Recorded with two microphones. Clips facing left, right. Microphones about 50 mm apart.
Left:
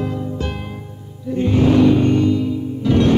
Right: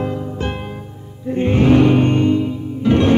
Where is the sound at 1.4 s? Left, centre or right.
Right.